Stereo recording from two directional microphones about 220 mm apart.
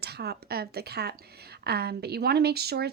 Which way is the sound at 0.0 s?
50° right (ahead or behind).